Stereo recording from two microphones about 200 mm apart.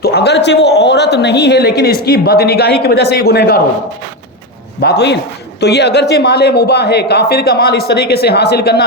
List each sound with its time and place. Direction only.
0.0 s speech: 55° left (ahead or behind)
4.8 s speech: 55° left (ahead or behind)